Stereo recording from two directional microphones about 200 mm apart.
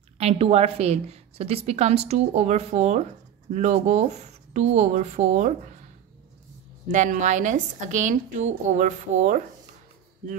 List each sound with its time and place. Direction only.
0.2 s a woman's voice: 30° right (ahead or behind)
6.9 s a woman's voice: 40° right (ahead or behind)